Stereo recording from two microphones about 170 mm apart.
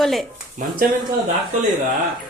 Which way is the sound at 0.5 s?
55° right (ahead or behind).